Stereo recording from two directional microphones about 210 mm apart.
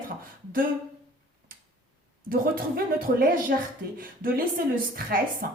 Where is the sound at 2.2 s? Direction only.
45° right (ahead or behind).